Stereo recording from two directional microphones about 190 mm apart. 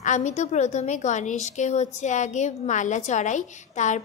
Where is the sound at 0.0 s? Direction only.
40° left (ahead or behind).